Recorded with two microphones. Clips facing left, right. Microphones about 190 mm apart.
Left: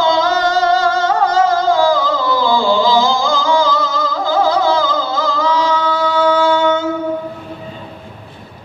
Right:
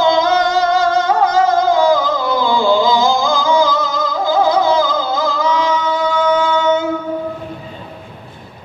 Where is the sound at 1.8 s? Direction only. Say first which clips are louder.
Right 1 dB; 15° right (ahead or behind).